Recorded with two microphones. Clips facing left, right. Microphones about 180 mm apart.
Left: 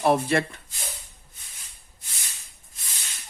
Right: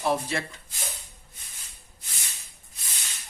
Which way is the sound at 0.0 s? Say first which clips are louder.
Left 6 dB; 60° left (ahead or behind).